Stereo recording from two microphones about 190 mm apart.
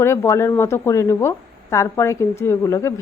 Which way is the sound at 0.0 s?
15° left (ahead or behind).